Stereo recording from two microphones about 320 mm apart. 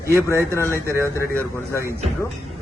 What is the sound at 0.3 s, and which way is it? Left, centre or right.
Speech, centre.